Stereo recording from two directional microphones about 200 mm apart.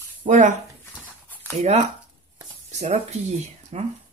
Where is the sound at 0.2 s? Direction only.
40° right (ahead or behind).